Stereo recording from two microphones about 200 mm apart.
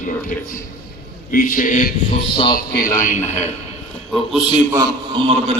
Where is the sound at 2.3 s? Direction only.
25° left (ahead or behind).